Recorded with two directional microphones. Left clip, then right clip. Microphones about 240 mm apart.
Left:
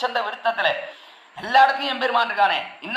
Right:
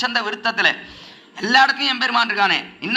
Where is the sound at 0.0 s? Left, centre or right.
Right.